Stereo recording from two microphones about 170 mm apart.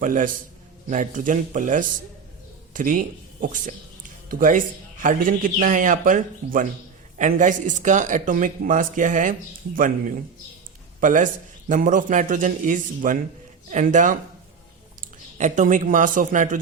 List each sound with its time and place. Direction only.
0.0 s a man's voice: 50° right (ahead or behind)
11.0 s a man's voice: 50° right (ahead or behind)
15.4 s a man's voice: 45° right (ahead or behind)